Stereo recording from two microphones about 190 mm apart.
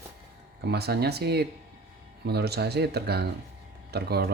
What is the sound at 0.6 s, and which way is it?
Speech, 60° right (ahead or behind).